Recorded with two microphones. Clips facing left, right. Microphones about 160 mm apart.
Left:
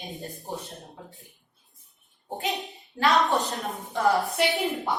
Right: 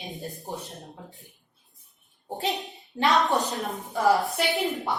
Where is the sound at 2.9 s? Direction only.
20° right (ahead or behind).